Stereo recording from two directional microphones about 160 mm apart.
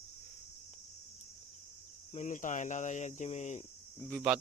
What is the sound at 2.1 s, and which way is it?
Speech, 50° left (ahead or behind).